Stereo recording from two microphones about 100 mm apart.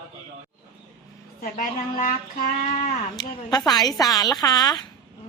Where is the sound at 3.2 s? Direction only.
45° left (ahead or behind).